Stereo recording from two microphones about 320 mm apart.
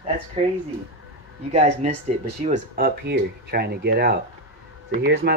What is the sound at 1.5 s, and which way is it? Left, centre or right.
Speech, right.